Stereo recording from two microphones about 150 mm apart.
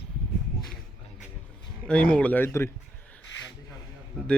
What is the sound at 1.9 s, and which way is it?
Speech, 10° left (ahead or behind).